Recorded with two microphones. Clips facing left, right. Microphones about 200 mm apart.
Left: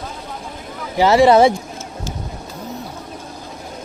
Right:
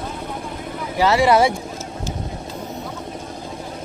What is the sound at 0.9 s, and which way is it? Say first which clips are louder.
Speech: left 4 dB; 25° left (ahead or behind).